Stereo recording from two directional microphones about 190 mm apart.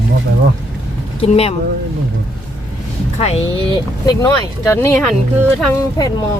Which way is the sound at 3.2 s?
30° left (ahead or behind).